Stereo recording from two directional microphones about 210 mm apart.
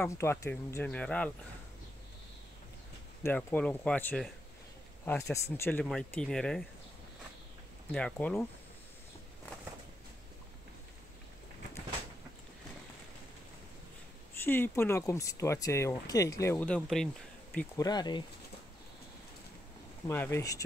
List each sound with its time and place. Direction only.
0.0 s speech: 10° left (ahead or behind)
3.3 s speech: 10° left (ahead or behind)
5.3 s speech: 10° left (ahead or behind)
7.9 s speech: 5° left (ahead or behind)
14.4 s speech: 10° left (ahead or behind)
17.7 s speech: 20° left (ahead or behind)
20.1 s speech: 10° left (ahead or behind)